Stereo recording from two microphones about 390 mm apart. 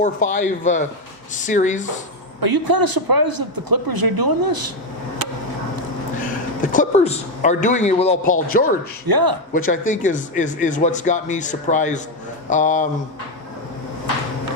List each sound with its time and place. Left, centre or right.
0.0 s speech: centre
2.4 s a man's voice: right
6.2 s speech: centre
9.0 s a man's voice: right
9.6 s speech: left